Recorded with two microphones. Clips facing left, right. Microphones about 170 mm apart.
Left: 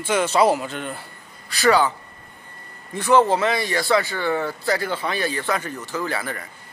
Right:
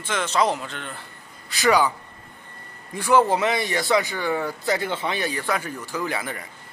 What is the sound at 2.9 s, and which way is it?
Speech, 10° right (ahead or behind).